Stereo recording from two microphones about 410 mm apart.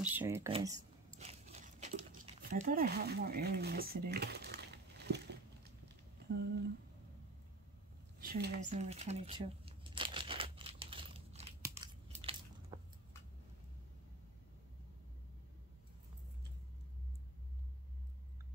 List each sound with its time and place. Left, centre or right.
0.0 s crumpling: centre; by 5.7 s right
6.2 s a sound: right
8.2 s shuffling cards: right